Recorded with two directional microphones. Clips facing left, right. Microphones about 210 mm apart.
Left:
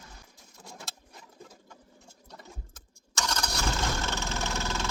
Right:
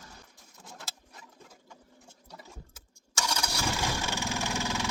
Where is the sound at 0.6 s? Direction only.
5° right (ahead or behind).